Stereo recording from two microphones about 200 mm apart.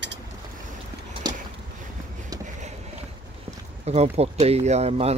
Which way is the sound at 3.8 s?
35° right (ahead or behind).